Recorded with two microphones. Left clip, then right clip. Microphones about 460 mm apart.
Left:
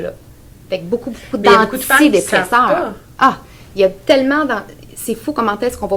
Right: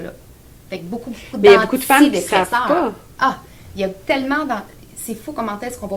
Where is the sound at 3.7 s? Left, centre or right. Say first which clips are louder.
Left 8 dB; left.